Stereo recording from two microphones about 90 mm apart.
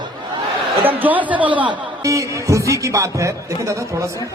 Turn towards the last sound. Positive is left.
turn(degrees=-35)  # may be behind; listen again after turning